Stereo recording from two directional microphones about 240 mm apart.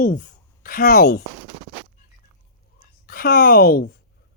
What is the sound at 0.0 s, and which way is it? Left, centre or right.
Speech, left.